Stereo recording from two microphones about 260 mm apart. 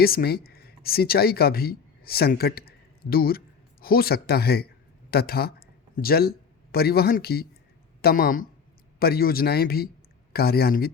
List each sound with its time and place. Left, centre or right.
0.0 s a man's voice: left